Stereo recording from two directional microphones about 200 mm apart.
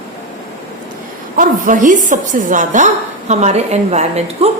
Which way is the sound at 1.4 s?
40° right (ahead or behind).